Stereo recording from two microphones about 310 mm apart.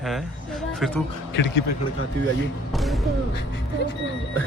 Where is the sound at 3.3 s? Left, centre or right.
Left.